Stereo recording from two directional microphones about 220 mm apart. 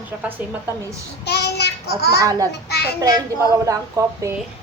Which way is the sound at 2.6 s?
50° left (ahead or behind).